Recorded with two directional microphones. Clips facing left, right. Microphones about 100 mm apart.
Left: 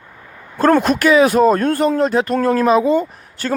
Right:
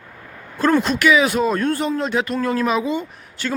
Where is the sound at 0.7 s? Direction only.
55° left (ahead or behind).